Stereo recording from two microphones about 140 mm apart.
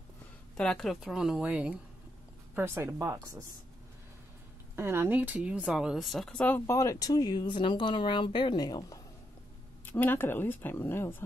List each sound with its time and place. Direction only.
0.6 s speech: 5° left (ahead or behind); by 3.4 s 25° right (ahead or behind)
4.7 s speech: 15° right (ahead or behind); by 9.0 s 25° left (ahead or behind)
9.8 s speech: 15° left (ahead or behind)